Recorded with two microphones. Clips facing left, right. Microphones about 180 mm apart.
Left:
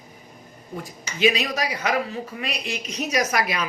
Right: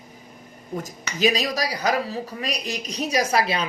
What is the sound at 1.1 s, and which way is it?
Speech, 35° right (ahead or behind).